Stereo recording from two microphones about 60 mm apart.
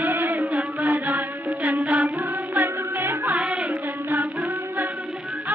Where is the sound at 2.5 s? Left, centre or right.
Right.